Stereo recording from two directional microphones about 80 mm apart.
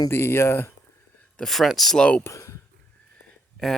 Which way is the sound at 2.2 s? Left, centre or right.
Left.